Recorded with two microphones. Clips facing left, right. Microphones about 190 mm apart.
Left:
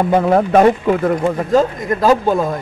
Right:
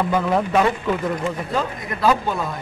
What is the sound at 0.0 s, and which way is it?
Speech, 50° left (ahead or behind).